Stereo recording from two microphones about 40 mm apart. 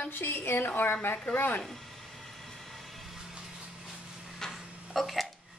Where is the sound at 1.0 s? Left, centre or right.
Left.